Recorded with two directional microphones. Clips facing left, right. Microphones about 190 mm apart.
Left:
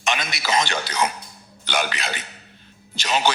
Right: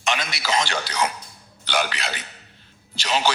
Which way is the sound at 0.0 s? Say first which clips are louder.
Even; 20° left (ahead or behind).